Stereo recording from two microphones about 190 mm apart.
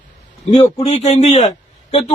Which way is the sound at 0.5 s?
30° left (ahead or behind).